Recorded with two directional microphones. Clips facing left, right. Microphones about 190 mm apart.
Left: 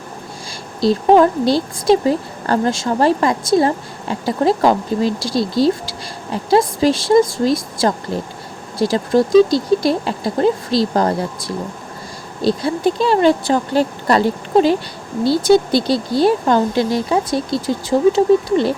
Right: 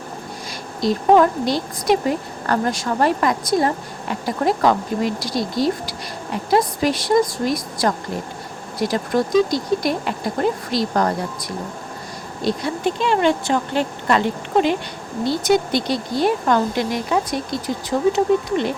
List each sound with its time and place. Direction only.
0.8 s speech: 30° left (ahead or behind)